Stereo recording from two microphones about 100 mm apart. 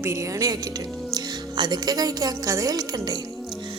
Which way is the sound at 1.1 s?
45° right (ahead or behind).